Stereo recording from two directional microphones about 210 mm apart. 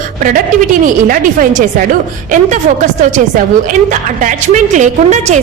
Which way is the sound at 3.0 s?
35° right (ahead or behind).